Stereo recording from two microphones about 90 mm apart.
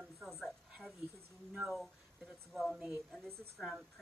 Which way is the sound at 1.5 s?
Centre (ahead or behind).